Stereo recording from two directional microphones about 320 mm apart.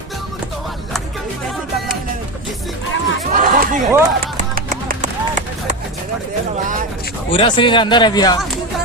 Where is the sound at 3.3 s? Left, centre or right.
Right.